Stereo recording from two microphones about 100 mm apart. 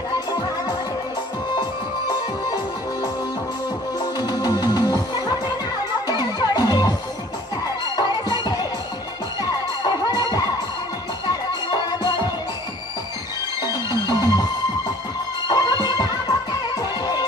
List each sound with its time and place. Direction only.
1.5 s music: 45° left (ahead or behind)
12.0 s music: 45° left (ahead or behind)
13.6 s music: 45° left (ahead or behind)
15.4 s music: 45° left (ahead or behind)